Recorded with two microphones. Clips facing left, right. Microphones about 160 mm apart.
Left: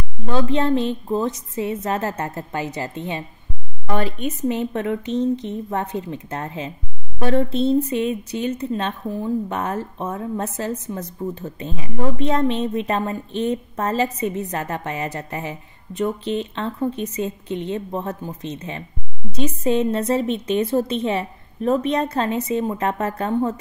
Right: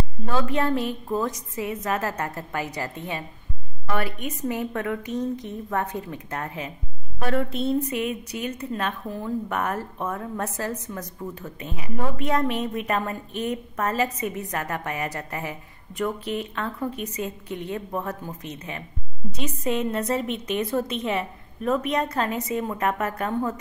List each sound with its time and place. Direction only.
0.3 s speech: 25° left (ahead or behind)